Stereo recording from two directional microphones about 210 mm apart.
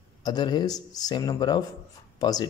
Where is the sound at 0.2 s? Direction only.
20° left (ahead or behind).